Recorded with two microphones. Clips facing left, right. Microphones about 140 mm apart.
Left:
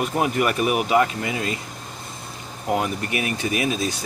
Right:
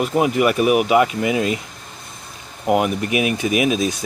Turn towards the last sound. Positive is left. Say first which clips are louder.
# right 5 dB
turn(degrees=-15)  # may be behind; listen again after turning